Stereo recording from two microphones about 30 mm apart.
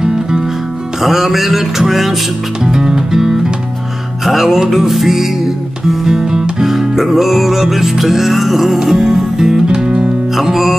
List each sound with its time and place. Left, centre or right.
1.0 s music: centre
4.2 s music: centre
9.7 s music: right
10.3 s music: centre